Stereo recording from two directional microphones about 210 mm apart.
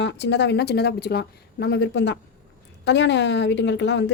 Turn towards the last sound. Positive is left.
turn(degrees=55)  # may be behind; listen again after turning